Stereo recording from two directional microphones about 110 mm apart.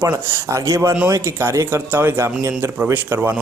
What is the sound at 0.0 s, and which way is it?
A man's voice, 25° right (ahead or behind).